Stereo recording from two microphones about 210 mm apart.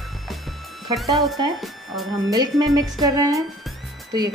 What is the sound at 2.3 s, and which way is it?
Speech, 20° right (ahead or behind).